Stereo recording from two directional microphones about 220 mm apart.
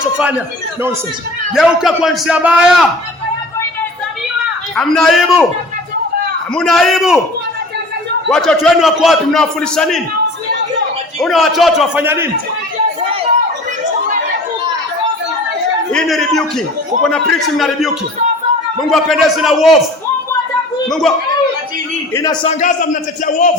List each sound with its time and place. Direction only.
0.2 s a man's voice: 10° right (ahead or behind)
4.8 s a man's voice: centre (ahead or behind)
6.5 s a man's voice: 5° left (ahead or behind)
8.3 s a man's voice: centre (ahead or behind)
11.2 s a man's voice: centre (ahead or behind)
15.9 s a man's voice: centre (ahead or behind)
20.8 s speech: centre (ahead or behind)
22.1 s a man's voice: 15° left (ahead or behind)
22.4 s a man's voice: 35° left (ahead or behind)